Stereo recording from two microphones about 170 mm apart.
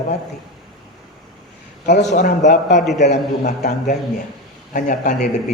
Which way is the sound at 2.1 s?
50° left (ahead or behind).